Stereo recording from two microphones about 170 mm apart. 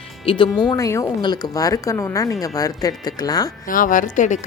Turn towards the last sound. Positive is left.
turn(degrees=45)  # may be behind; listen again after turning